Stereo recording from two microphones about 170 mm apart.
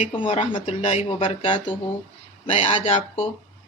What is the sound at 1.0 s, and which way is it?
A man's voice, 35° left (ahead or behind).